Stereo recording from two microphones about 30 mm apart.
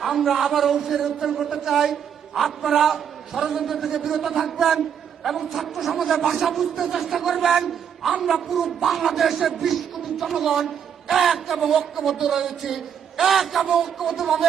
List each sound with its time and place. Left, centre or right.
0.0 s a man's voice: centre